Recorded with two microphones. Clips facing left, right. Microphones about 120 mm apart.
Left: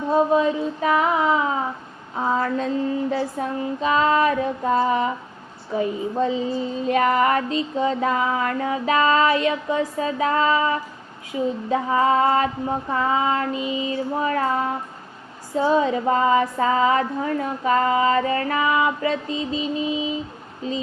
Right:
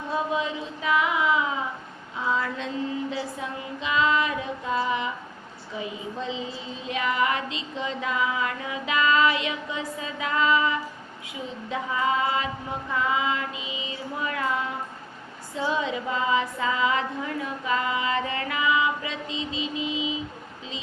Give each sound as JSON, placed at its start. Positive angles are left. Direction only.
{"t": 0.1, "sound": "female singing", "side_deg": 40}
{"t": 2.1, "sound": "child singing", "side_deg": 40}
{"t": 11.7, "sound": "female singing", "side_deg": 40}
{"t": 15.5, "sound": "child singing", "side_deg": 40}